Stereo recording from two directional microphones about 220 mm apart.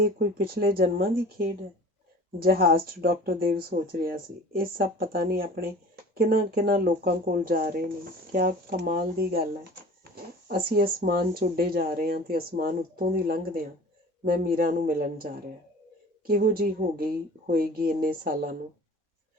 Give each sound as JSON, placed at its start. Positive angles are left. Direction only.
{"t": 0.0, "sound": "speech", "side_deg": -40}